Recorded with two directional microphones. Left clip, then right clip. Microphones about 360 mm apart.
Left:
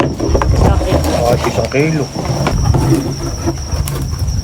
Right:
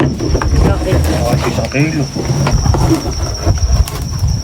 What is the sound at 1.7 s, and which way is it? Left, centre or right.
Cricket, left.